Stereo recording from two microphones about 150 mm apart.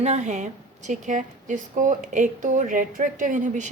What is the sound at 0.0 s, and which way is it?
A woman's voice, 50° right (ahead or behind).